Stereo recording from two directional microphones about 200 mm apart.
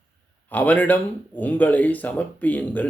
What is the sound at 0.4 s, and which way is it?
Speech, 10° left (ahead or behind).